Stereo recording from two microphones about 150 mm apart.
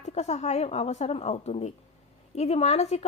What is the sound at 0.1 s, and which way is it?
A woman's voice, 50° left (ahead or behind).